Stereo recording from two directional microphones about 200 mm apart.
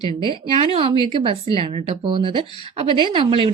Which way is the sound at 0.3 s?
25° right (ahead or behind).